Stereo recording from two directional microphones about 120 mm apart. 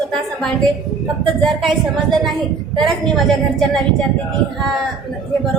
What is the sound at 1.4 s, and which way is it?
Speech, centre (ahead or behind).